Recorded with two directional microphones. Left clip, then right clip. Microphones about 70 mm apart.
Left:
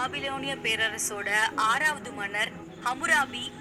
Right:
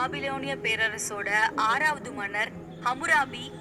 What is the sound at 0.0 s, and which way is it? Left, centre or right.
A woman's voice, right.